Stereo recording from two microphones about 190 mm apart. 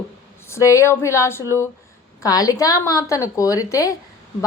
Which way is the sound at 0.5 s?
15° left (ahead or behind).